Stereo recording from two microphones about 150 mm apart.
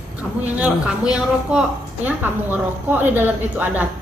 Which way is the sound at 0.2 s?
5° right (ahead or behind).